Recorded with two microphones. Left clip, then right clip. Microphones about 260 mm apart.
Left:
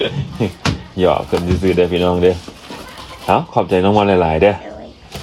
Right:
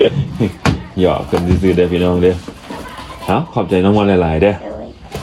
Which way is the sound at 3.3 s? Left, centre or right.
Left.